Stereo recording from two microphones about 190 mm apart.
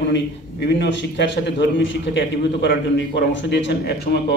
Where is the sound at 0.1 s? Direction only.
65° left (ahead or behind).